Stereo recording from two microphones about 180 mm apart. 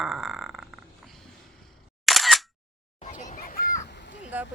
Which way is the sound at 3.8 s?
75° left (ahead or behind).